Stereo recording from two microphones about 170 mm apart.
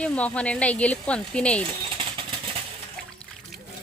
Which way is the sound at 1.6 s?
30° right (ahead or behind).